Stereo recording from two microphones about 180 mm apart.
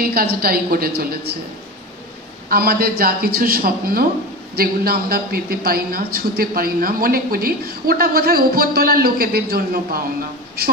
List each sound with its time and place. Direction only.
0.0 s a man's voice: 55° right (ahead or behind)
2.5 s a man's voice: 55° right (ahead or behind)